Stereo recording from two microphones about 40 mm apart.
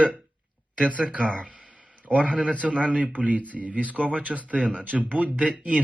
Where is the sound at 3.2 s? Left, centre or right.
Right.